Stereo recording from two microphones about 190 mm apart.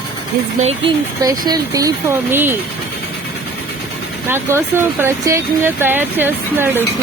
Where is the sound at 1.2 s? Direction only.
20° right (ahead or behind).